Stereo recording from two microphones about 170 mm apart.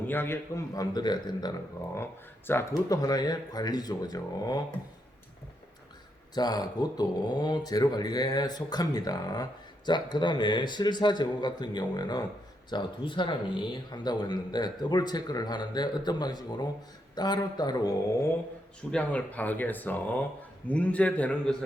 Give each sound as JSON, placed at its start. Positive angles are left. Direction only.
{"t": 0.1, "sound": "speech", "side_deg": 15}
{"t": 6.3, "sound": "speech", "side_deg": 25}
{"t": 18.9, "sound": "speech", "side_deg": 5}